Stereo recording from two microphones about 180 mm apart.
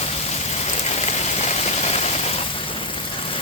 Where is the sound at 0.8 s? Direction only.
40° left (ahead or behind).